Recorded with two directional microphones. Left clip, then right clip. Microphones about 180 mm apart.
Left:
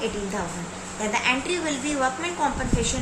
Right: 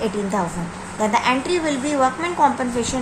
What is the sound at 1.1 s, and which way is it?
A woman's voice, 40° right (ahead or behind).